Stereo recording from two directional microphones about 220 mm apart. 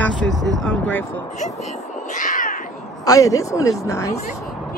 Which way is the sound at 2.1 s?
35° left (ahead or behind).